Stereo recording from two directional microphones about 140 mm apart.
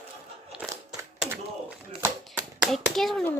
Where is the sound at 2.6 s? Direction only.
Centre (ahead or behind).